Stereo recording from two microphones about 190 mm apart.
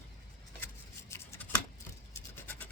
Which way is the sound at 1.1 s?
10° left (ahead or behind).